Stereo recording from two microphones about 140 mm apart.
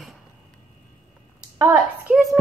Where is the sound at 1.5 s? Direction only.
20° right (ahead or behind).